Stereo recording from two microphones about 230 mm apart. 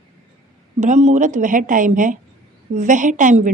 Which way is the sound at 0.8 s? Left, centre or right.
Right.